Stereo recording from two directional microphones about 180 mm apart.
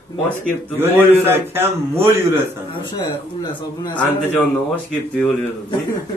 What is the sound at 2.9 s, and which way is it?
Speech, 25° left (ahead or behind).